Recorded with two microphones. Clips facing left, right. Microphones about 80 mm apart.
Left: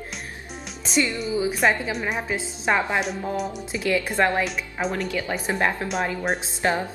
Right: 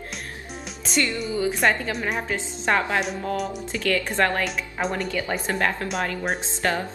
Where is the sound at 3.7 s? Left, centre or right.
Centre.